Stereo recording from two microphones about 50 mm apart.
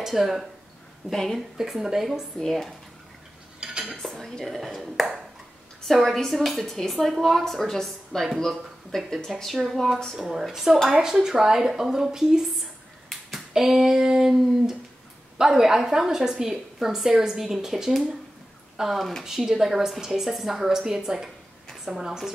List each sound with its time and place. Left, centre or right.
0.0 s speech: centre
1.1 s speech: centre
1.6 s a woman's voice: centre
2.3 s speech: centre
3.6 s cutlery: centre
4.0 s dishes: centre
4.6 s a sound: centre
5.9 s a woman's voice: centre